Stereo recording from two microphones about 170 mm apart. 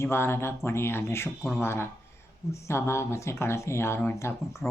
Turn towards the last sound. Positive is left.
turn(degrees=15)  # may be behind; listen again after turning